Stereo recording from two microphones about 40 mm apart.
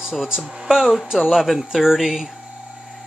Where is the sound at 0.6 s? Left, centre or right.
Centre.